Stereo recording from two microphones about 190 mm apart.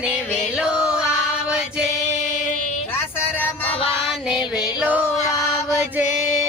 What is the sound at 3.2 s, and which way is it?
Music, 10° left (ahead or behind).